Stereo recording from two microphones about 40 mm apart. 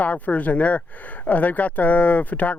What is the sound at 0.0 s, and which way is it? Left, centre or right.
Speech, left.